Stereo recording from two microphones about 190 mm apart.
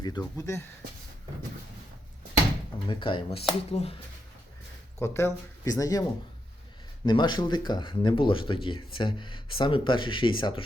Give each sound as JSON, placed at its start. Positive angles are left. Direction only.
{"t": 0.0, "sound": "speech", "side_deg": 20}
{"t": 2.9, "sound": "speech", "side_deg": 25}
{"t": 4.9, "sound": "speech", "side_deg": 15}